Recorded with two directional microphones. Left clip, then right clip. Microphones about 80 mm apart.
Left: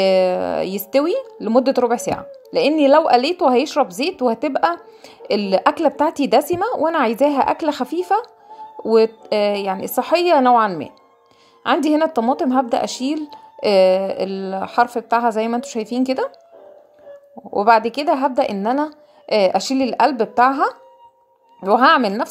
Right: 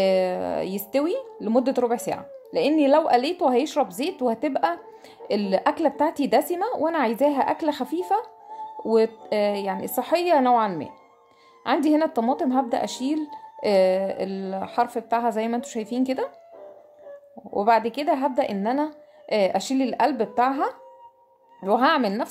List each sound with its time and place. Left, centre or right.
0.0 s a woman's voice: left
17.5 s a woman's voice: left